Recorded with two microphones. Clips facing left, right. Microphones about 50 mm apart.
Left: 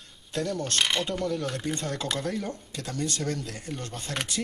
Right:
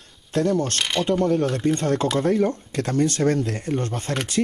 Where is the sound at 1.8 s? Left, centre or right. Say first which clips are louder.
Right 10 dB; right.